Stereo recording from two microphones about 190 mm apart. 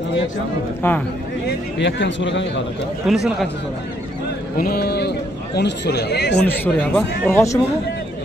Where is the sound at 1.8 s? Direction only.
70° left (ahead or behind).